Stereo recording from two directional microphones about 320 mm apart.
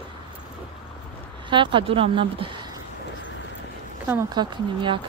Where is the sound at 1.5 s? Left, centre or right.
Centre.